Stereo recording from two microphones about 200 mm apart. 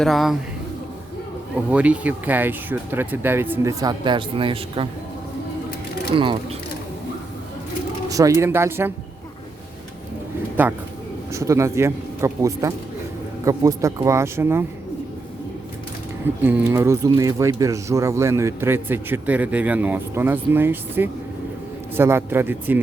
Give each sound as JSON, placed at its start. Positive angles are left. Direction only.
{"t": 0.0, "sound": "speech", "side_deg": 0}
{"t": 1.7, "sound": "speech", "side_deg": -5}
{"t": 6.1, "sound": "speech", "side_deg": -25}
{"t": 8.1, "sound": "speech", "side_deg": -15}
{"t": 10.6, "sound": "speech", "side_deg": -10}
{"t": 16.4, "sound": "speech", "side_deg": -10}